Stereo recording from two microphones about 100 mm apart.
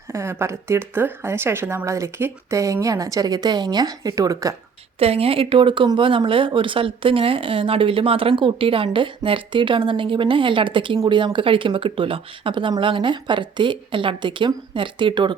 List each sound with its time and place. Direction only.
0.1 s speech: 25° right (ahead or behind)
4.9 s speech: 85° right; by 15.4 s 55° right (ahead or behind)